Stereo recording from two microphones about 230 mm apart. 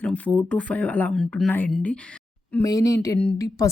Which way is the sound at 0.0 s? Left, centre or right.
Centre.